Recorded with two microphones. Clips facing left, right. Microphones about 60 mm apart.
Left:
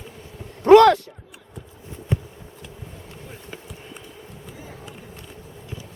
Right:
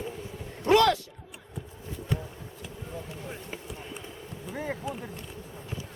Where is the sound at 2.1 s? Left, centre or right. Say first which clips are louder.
Left 5 dB; left.